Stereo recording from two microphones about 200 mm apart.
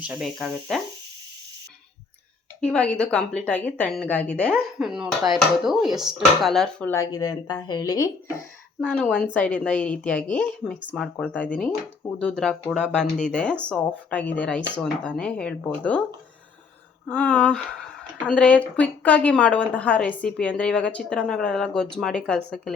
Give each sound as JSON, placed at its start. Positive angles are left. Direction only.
{"t": 0.1, "sound": "a woman's voice", "side_deg": 0}
{"t": 2.6, "sound": "a woman's voice", "side_deg": 5}
{"t": 8.8, "sound": "a woman's voice", "side_deg": 5}
{"t": 17.1, "sound": "a woman's voice", "side_deg": 5}